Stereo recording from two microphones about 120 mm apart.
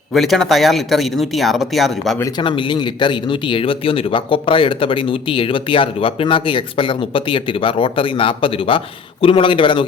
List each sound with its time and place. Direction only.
0.1 s speech: centre (ahead or behind)
2.4 s speech: 40° left (ahead or behind)